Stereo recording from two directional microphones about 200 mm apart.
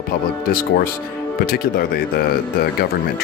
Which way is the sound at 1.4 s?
50° left (ahead or behind).